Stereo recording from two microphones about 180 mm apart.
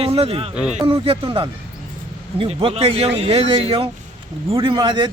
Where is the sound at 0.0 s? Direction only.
35° right (ahead or behind).